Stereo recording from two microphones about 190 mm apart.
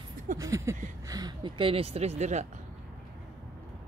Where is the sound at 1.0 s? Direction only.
20° right (ahead or behind); by 2.4 s 35° right (ahead or behind).